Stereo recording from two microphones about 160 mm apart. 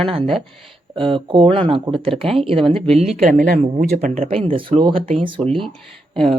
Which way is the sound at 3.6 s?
45° right (ahead or behind).